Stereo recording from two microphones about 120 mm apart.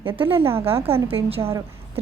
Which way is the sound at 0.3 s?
20° right (ahead or behind).